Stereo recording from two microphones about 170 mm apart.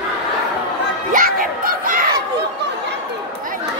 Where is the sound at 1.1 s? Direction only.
55° right (ahead or behind).